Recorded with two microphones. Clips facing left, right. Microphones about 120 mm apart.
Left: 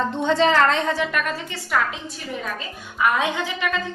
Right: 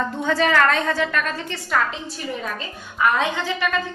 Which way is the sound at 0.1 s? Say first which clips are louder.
Left 2 dB; 25° left (ahead or behind).